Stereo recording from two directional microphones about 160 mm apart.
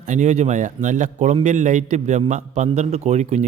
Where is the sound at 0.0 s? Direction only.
50° right (ahead or behind).